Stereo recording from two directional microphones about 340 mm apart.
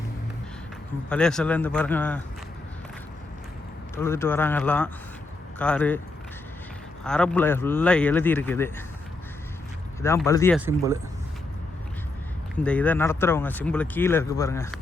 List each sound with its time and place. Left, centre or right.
1.1 s speech: centre
3.9 s speech: centre
7.0 s speech: centre
10.0 s speech: centre
12.6 s speech: centre